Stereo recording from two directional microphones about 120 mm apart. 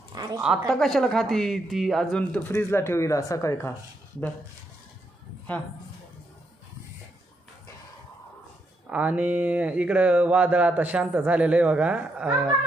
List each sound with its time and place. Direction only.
0.1 s a sound: 35° right (ahead or behind)
0.4 s a woman's voice: centre (ahead or behind); by 3.7 s 25° left (ahead or behind)
8.8 s speech: 10° right (ahead or behind)